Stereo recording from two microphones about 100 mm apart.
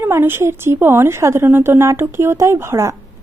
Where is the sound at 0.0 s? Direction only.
20° right (ahead or behind).